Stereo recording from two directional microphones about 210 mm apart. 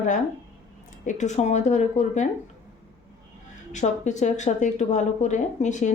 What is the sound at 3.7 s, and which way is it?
A woman's voice, 35° left (ahead or behind).